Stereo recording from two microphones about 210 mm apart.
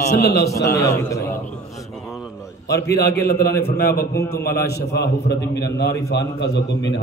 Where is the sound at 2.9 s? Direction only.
45° left (ahead or behind).